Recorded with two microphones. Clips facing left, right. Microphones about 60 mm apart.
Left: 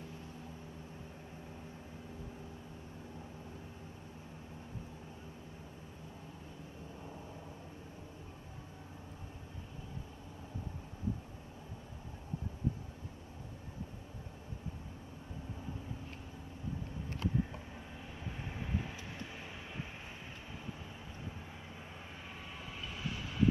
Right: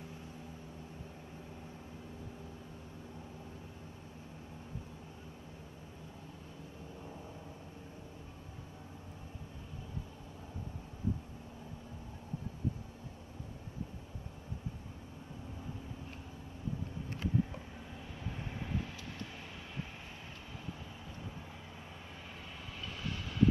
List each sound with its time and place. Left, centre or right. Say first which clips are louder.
18.4 s vehicle: even; centre
23.0 s train: even; centre